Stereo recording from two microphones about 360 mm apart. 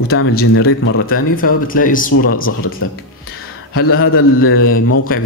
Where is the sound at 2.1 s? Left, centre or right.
Left.